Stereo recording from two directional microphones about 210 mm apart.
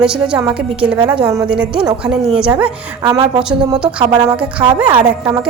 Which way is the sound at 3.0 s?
25° right (ahead or behind).